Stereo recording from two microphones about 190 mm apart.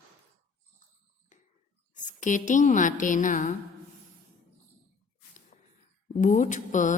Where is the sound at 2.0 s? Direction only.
40° left (ahead or behind).